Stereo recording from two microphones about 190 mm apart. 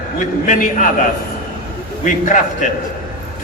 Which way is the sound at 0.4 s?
40° left (ahead or behind).